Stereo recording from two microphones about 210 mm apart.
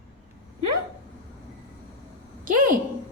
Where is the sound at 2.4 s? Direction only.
40° right (ahead or behind).